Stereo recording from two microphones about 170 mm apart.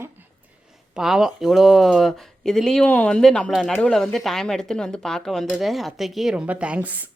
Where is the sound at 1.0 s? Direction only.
5° right (ahead or behind).